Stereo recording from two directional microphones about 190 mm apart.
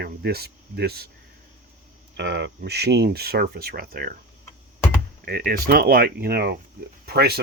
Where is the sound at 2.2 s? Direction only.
65° right (ahead or behind); by 4.1 s 50° right (ahead or behind).